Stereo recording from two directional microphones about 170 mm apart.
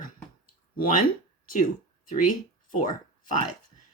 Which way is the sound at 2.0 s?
50° left (ahead or behind).